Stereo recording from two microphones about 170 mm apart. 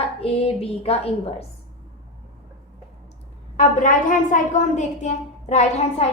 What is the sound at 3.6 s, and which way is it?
A woman's voice, 50° left (ahead or behind).